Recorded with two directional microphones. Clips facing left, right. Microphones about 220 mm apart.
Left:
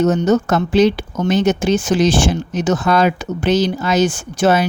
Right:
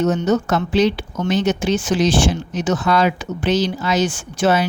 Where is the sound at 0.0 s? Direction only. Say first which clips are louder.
Left 3 dB; 45° left (ahead or behind).